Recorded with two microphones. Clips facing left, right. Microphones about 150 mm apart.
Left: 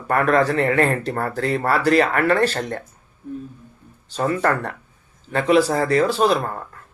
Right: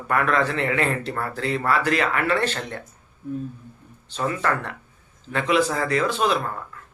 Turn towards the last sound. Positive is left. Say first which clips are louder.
# left 4 dB
turn(degrees=35)  # may be behind; listen again after turning